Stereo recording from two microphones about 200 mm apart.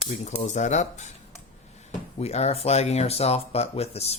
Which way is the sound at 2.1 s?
30° left (ahead or behind).